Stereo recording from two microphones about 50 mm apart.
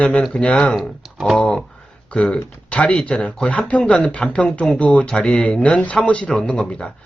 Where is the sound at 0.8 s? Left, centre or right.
Centre.